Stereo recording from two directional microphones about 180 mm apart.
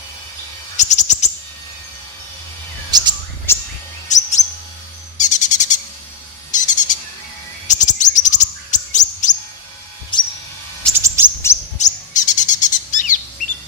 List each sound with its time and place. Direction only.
0.8 s owl: 40° left (ahead or behind)
2.9 s chirp: 25° right (ahead or behind)
3.5 s a sound: 15° left (ahead or behind)
4.1 s chirp: 40° left (ahead or behind)
5.1 s bird vocalization: 45° left (ahead or behind)
6.5 s bird: 45° left (ahead or behind)
7.7 s chirp: 45° left (ahead or behind)
10.1 s a sound: 25° left (ahead or behind)
11.5 s chirp: 15° left (ahead or behind)
11.8 s bird: 45° left (ahead or behind)